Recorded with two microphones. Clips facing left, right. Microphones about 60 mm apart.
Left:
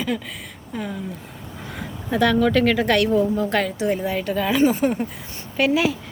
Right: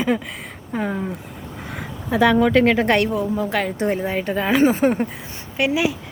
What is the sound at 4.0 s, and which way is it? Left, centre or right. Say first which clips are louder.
Speech: right 1 dB; right.